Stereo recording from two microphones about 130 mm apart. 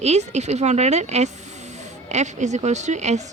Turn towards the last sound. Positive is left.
turn(degrees=-65)  # may be behind; listen again after turning